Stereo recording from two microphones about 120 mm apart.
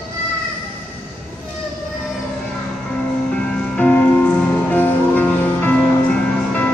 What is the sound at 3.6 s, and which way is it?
Music, 15° left (ahead or behind).